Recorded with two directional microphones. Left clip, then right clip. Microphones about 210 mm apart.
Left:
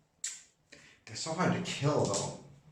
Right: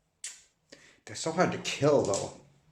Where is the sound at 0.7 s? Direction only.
35° right (ahead or behind).